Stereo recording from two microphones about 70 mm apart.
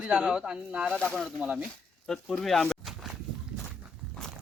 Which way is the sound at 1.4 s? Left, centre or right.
Centre.